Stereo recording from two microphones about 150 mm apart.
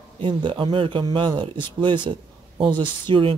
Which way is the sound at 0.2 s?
35° right (ahead or behind).